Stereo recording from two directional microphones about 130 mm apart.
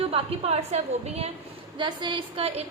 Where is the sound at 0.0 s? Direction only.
50° right (ahead or behind).